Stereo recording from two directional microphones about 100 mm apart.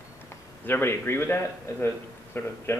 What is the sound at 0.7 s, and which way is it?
Speech, 25° left (ahead or behind).